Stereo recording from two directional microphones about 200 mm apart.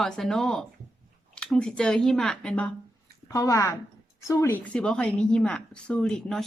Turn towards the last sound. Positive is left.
turn(degrees=0)  # may be behind; listen again after turning